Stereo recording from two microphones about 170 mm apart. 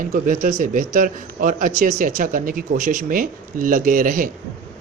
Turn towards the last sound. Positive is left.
turn(degrees=-55)  # may be behind; listen again after turning